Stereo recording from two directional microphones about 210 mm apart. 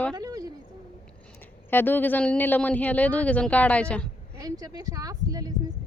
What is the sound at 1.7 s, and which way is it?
Speech, 10° left (ahead or behind).